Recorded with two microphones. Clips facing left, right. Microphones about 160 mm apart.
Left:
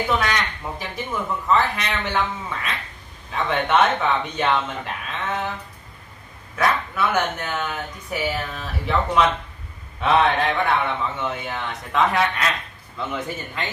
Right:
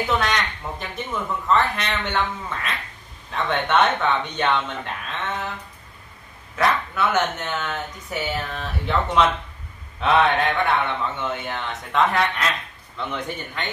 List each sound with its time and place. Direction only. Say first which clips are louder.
0.2 s a sound: even; centre (ahead or behind)
1.5 s speech: even; centre (ahead or behind)
6.5 s speech: even; centre (ahead or behind)